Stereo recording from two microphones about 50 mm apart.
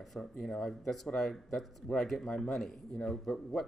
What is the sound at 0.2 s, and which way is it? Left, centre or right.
Speech, centre.